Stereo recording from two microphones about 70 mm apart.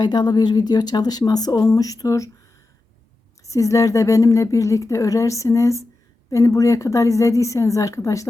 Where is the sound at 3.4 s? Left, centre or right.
Left.